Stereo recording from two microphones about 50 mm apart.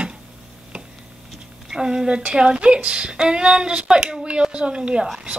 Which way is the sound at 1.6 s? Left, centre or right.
Centre.